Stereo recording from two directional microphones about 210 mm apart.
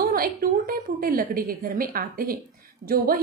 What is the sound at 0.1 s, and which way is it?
A woman's voice, 45° right (ahead or behind).